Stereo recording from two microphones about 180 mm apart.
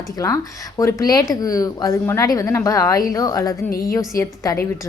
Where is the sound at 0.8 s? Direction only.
15° left (ahead or behind).